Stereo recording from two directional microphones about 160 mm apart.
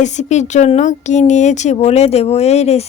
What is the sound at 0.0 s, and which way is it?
Speech, 45° left (ahead or behind).